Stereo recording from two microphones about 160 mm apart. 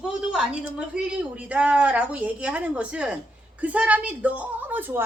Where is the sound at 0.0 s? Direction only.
5° right (ahead or behind).